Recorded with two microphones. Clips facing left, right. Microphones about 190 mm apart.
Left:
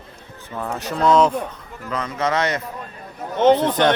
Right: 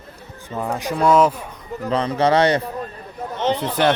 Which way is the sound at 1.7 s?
35° right (ahead or behind).